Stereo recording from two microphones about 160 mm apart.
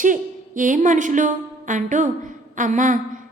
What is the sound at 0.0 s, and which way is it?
A woman's voice, 55° right (ahead or behind).